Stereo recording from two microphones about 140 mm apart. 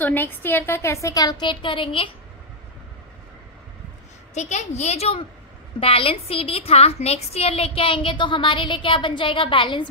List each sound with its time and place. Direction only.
0.0 s a woman's voice: 15° left (ahead or behind); by 2.0 s 40° left (ahead or behind)
4.3 s a woman's voice: 55° left (ahead or behind); by 9.8 s 35° left (ahead or behind)